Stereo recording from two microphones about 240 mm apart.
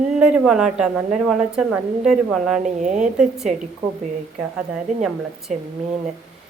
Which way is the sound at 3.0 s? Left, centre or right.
Centre.